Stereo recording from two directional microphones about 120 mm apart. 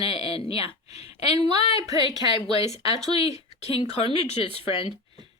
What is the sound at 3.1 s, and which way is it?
A woman's voice, 55° left (ahead or behind).